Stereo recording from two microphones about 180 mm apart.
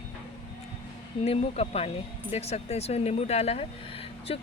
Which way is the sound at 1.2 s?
35° left (ahead or behind).